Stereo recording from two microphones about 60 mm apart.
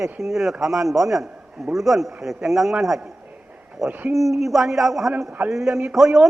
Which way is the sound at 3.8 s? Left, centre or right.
Right.